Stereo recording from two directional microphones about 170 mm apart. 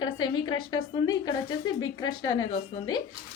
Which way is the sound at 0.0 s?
25° left (ahead or behind).